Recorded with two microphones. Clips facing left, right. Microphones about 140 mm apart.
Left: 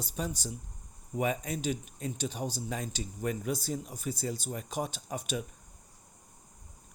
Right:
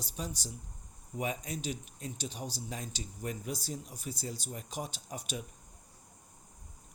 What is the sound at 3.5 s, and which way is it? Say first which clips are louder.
Speech: left 5 dB; 55° left (ahead or behind).